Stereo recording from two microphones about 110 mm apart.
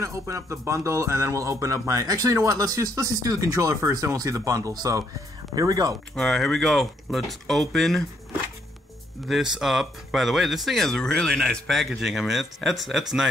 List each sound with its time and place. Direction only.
0.0 s speech: 25° right (ahead or behind)
6.1 s speech: 5° left (ahead or behind)
9.3 s speech: 5° right (ahead or behind)